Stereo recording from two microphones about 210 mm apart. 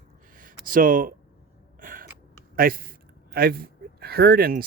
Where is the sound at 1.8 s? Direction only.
40° right (ahead or behind).